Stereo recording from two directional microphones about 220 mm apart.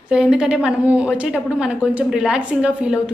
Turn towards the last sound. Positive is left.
turn(degrees=-5)  # may be behind; listen again after turning